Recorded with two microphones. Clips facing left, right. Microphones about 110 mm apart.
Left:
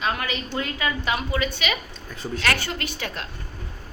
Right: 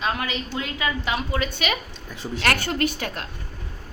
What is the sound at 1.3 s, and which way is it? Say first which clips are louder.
A woman's voice: even; 45° right (ahead or behind).